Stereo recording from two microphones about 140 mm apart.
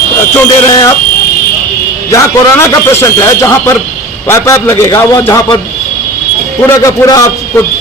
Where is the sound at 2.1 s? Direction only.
20° left (ahead or behind).